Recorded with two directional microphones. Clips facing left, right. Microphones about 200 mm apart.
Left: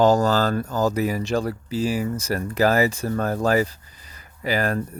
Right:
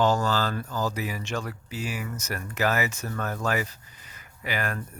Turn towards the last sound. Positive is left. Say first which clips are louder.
# left 8 dB
turn(degrees=35)  # may be behind; listen again after turning